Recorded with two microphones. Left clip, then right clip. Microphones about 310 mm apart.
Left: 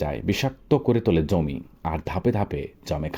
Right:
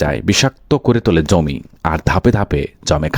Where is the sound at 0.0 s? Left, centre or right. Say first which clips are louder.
Right 11 dB; right.